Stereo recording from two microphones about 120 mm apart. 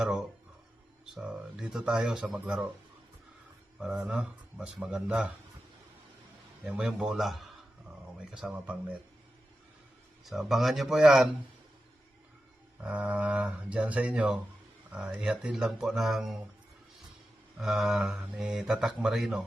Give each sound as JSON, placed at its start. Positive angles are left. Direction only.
{"t": 0.0, "sound": "speech", "side_deg": -5}
{"t": 3.8, "sound": "speech", "side_deg": -10}
{"t": 6.7, "sound": "speech", "side_deg": -10}
{"t": 10.2, "sound": "speech", "side_deg": 0}
{"t": 12.8, "sound": "speech", "side_deg": -10}
{"t": 17.6, "sound": "speech", "side_deg": -5}